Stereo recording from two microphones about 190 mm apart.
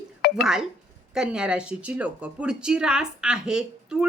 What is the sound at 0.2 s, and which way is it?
Dishes, 55° left (ahead or behind).